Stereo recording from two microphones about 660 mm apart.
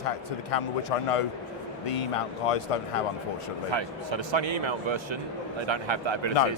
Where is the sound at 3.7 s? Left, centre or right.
Right.